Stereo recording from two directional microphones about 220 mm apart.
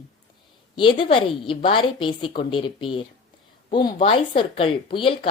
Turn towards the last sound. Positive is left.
turn(degrees=25)  # may be behind; listen again after turning